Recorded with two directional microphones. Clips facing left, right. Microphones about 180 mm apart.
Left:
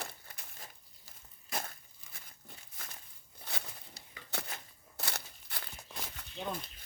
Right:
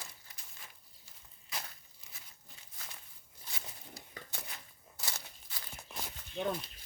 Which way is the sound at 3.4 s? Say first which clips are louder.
Left 5 dB; 65° left (ahead or behind).